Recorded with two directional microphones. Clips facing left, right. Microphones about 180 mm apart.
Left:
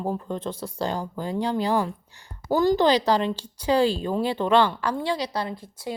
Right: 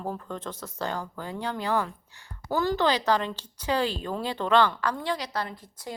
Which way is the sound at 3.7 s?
30° left (ahead or behind).